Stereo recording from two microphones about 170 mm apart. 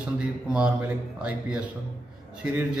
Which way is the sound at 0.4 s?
5° right (ahead or behind).